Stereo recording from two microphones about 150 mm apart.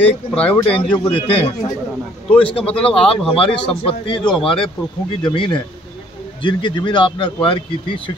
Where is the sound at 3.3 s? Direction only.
35° left (ahead or behind).